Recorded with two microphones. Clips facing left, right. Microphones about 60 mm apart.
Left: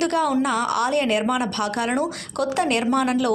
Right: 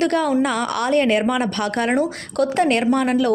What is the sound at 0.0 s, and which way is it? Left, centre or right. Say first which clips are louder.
Speech: right 2 dB; right.